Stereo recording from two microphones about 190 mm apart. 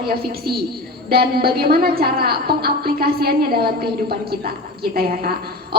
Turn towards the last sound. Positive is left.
turn(degrees=-50)  # may be behind; listen again after turning